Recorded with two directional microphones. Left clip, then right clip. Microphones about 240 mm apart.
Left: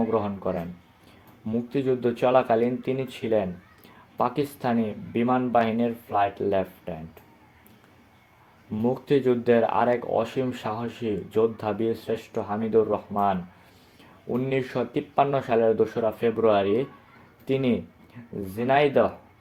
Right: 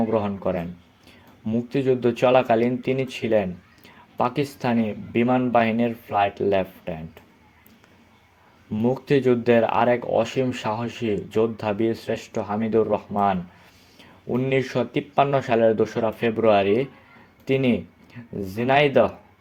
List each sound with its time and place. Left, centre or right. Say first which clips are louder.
0.1 s speech: right 3 dB; right
3.8 s a sound: right 2 dB; right
5.1 s speech: right 3 dB; right
8.7 s speech: right 2 dB; centre